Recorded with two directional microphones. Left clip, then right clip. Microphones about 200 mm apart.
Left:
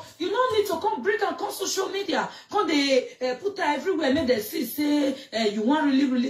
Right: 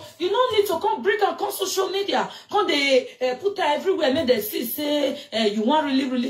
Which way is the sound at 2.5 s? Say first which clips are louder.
Right 3 dB; 30° right (ahead or behind).